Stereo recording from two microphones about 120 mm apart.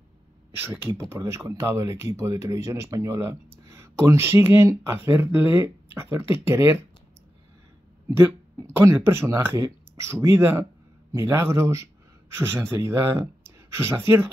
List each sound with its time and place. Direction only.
0.6 s speech: 20° right (ahead or behind)
8.2 s speech: 20° right (ahead or behind)
13.4 s a sound: 20° right (ahead or behind)